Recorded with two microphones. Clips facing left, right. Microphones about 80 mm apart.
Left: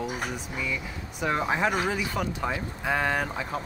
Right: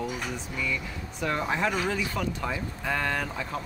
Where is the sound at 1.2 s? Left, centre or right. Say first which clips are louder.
Left 2 dB; centre.